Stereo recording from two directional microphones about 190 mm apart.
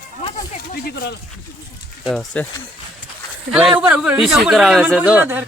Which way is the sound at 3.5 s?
5° right (ahead or behind).